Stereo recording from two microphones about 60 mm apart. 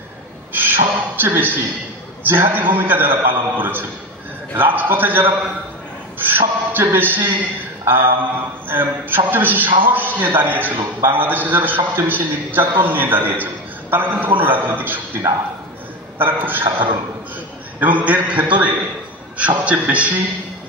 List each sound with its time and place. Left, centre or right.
0.5 s a sound: right
2.2 s a man's voice: right
6.1 s a sound: right
7.8 s a man's voice: right
16.2 s a man's voice: right
17.7 s a man's voice: right